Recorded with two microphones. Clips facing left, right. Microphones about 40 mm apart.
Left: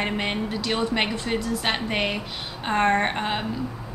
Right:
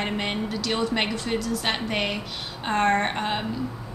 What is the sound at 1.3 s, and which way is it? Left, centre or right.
Speech, left.